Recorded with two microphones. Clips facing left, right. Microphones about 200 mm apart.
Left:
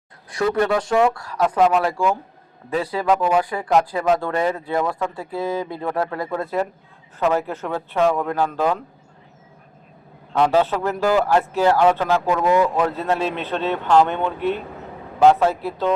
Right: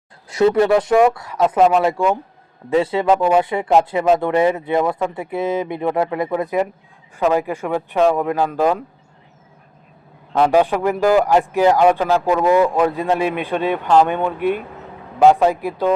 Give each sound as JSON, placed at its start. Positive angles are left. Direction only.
{"t": 0.3, "sound": "a man's voice", "side_deg": -25}
{"t": 10.3, "sound": "a man's voice", "side_deg": -10}